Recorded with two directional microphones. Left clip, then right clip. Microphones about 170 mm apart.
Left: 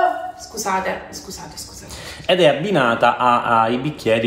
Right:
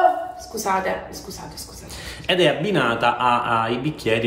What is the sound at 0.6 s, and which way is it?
Speech, 35° right (ahead or behind).